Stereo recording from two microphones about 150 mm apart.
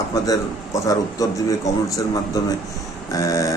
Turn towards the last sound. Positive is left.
turn(degrees=20)  # may be behind; listen again after turning